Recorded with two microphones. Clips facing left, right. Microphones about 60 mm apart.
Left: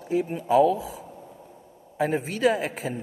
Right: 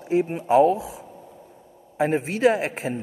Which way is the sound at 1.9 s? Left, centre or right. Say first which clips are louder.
Right 3 dB; right.